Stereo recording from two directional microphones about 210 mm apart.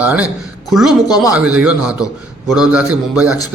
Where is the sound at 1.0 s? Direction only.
15° left (ahead or behind).